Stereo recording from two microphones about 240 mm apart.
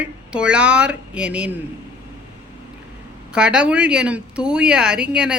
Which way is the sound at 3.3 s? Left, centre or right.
Centre.